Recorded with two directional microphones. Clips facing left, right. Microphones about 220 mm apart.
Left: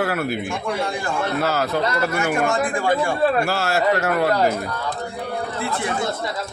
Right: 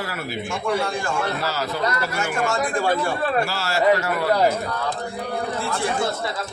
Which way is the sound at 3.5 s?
55° left (ahead or behind).